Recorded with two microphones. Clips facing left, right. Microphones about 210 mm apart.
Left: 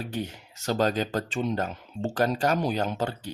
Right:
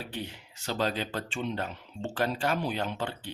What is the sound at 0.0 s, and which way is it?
Speech, 45° left (ahead or behind).